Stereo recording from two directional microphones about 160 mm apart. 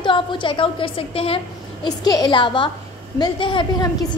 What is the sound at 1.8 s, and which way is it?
A woman's voice, 25° left (ahead or behind).